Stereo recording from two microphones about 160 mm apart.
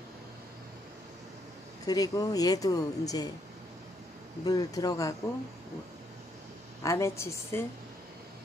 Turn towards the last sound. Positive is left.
turn(degrees=15)  # may be behind; listen again after turning